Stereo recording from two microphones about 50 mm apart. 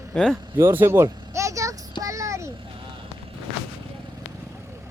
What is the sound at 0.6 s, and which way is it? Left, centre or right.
Speech, right.